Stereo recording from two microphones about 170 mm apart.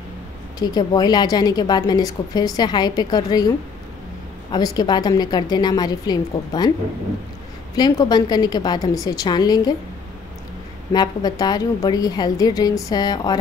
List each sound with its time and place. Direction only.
0.6 s a woman's voice: 25° left (ahead or behind)
7.7 s a woman's voice: 25° left (ahead or behind)
10.9 s a woman's voice: 25° left (ahead or behind)